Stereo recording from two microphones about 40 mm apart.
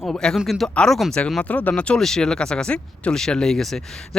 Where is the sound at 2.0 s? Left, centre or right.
Centre.